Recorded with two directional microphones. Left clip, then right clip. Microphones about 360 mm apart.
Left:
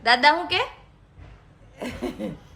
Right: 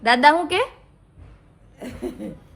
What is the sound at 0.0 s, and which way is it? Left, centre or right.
Speech, centre.